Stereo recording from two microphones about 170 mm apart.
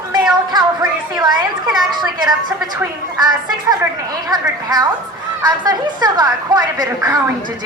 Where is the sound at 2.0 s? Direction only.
25° right (ahead or behind).